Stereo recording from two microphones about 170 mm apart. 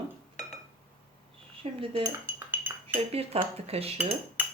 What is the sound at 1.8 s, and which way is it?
Speech, 30° right (ahead or behind).